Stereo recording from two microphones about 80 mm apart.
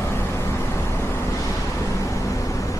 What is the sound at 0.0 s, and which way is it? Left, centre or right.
Vehicle, left.